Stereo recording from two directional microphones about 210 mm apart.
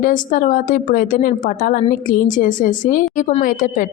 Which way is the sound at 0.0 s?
40° left (ahead or behind).